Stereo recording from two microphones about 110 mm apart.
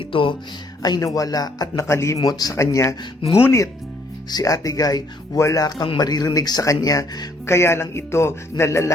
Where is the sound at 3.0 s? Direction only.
60° left (ahead or behind).